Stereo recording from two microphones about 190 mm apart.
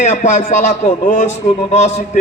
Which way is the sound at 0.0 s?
40° left (ahead or behind).